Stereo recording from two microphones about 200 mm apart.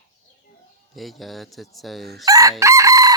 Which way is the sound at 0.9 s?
Centre (ahead or behind).